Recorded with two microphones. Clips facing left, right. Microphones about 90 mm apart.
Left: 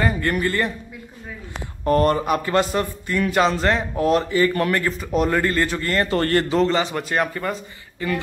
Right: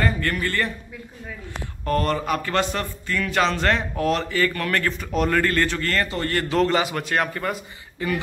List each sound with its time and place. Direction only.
0.0 s speech: 20° left (ahead or behind)
1.9 s speech: 25° left (ahead or behind)
4.8 s a man's voice: 5° left (ahead or behind)
6.0 s speech: 55° left (ahead or behind)
6.5 s a man's voice: centre (ahead or behind)
7.5 s speech: 10° right (ahead or behind)